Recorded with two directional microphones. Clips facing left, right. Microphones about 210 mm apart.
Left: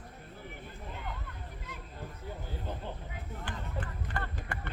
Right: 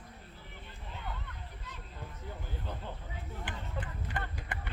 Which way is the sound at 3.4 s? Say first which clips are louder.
Left 2 dB; 20° right (ahead or behind).